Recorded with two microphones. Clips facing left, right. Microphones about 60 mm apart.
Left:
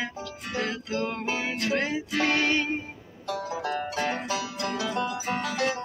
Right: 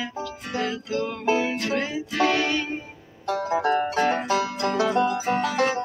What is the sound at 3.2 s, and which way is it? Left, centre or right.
Music, right.